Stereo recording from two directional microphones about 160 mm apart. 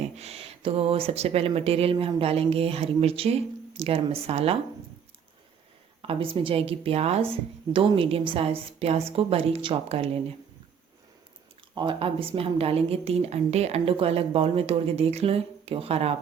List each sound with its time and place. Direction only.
0.2 s speech: 40° right (ahead or behind)
6.0 s speech: 35° right (ahead or behind)
11.7 s speech: 30° right (ahead or behind)